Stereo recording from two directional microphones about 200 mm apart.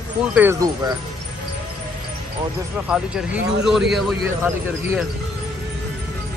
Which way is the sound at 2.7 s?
5° right (ahead or behind).